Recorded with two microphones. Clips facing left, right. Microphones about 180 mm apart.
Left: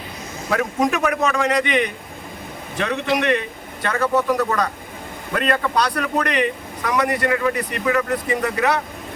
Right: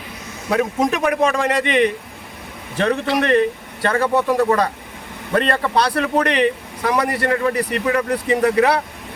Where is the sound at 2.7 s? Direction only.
35° right (ahead or behind).